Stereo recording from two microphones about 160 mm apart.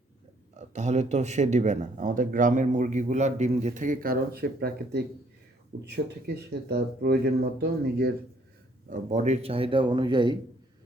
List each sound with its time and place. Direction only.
0.5 s speech: 45° right (ahead or behind); by 5.0 s 80° right
5.8 s speech: 90° right
8.9 s a man's voice: 50° right (ahead or behind); by 10.3 s 30° right (ahead or behind)